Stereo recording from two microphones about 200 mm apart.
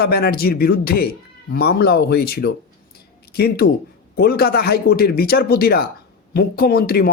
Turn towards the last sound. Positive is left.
turn(degrees=50)  # may be behind; listen again after turning